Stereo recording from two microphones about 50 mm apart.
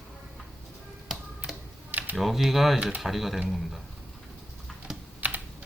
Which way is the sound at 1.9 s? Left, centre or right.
Right.